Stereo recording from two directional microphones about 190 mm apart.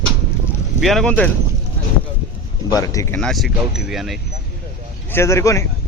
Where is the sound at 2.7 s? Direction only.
15° left (ahead or behind); by 4.2 s centre (ahead or behind).